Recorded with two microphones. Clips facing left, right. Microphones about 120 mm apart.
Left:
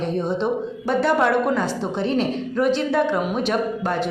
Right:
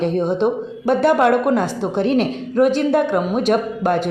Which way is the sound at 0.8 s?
50° right (ahead or behind).